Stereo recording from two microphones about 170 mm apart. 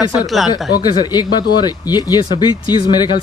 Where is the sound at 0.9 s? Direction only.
25° left (ahead or behind).